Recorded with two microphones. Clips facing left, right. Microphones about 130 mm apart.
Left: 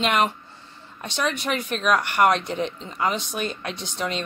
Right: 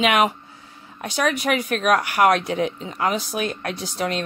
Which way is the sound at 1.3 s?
5° right (ahead or behind).